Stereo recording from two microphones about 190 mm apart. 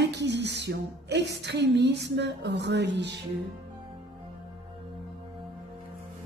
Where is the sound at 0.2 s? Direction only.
65° right (ahead or behind).